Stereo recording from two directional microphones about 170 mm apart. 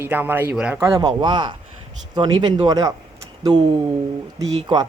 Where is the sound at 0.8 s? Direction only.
20° right (ahead or behind).